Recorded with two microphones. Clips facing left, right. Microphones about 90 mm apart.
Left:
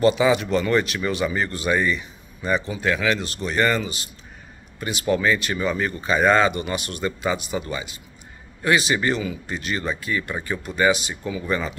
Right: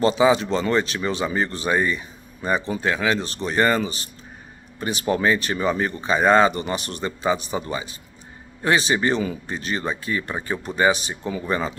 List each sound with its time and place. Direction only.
0.0 s speech: 30° right (ahead or behind)